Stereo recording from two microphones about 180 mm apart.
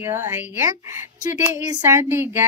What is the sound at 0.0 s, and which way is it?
Speech, 15° right (ahead or behind).